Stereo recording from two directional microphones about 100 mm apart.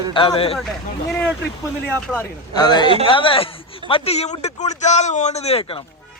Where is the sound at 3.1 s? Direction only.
60° left (ahead or behind).